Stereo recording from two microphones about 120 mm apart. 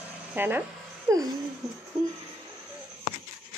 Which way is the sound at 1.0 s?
30° right (ahead or behind).